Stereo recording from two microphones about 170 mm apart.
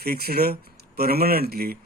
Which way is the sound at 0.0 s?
65° right (ahead or behind).